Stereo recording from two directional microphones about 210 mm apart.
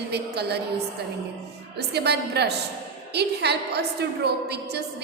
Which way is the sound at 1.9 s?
50° right (ahead or behind).